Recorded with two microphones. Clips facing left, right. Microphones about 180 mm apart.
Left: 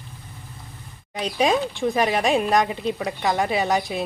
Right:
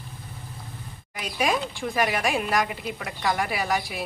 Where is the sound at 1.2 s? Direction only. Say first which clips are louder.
Left 5 dB; 25° left (ahead or behind).